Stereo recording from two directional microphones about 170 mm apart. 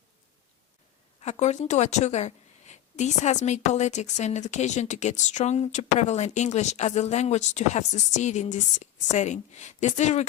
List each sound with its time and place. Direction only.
1.2 s a woman's voice: 45° left (ahead or behind)